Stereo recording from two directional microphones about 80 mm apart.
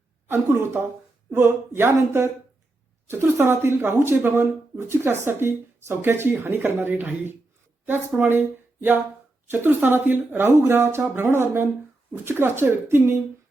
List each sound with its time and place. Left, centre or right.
0.3 s a woman's voice: right